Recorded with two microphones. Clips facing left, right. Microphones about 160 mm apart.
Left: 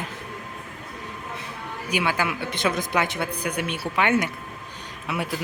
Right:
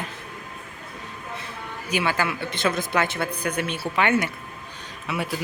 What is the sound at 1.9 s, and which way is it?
Speech, 15° left (ahead or behind).